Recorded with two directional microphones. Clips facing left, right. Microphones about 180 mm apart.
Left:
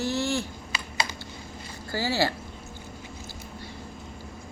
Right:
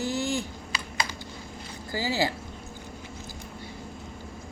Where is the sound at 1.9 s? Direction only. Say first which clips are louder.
Left 1 dB; 15° right (ahead or behind).